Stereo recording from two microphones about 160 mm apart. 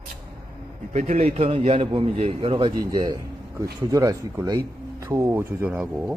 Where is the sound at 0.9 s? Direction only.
45° right (ahead or behind).